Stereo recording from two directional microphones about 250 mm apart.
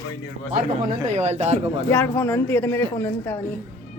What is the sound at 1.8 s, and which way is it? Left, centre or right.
Speech, centre.